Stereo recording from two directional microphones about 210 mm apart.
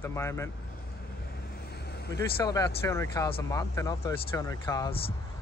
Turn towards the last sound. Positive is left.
turn(degrees=20)  # may be behind; listen again after turning